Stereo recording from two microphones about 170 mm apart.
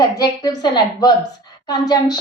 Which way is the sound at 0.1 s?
20° left (ahead or behind).